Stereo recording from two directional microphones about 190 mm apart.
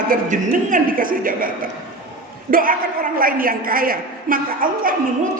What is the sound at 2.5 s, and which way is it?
A woman's voice, 50° right (ahead or behind).